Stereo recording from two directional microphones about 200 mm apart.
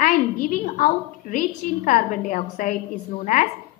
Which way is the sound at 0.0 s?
40° left (ahead or behind).